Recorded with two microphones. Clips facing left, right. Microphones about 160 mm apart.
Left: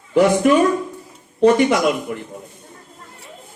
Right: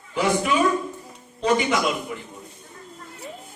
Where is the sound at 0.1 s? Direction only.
55° left (ahead or behind).